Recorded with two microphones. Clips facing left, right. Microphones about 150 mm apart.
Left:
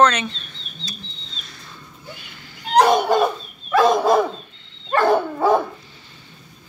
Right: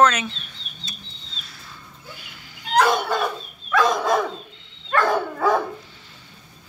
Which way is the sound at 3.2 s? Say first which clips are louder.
Left 6 dB; 25° left (ahead or behind).